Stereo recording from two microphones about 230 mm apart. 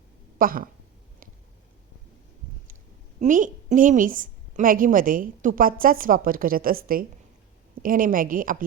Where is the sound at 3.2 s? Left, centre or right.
Right.